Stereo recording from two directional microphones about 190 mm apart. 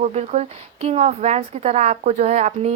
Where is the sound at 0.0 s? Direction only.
35° right (ahead or behind).